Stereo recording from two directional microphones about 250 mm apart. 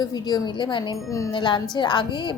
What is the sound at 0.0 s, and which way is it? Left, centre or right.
A woman's voice, centre.